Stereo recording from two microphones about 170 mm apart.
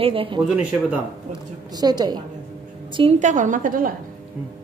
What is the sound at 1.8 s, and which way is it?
A woman's voice, 25° right (ahead or behind).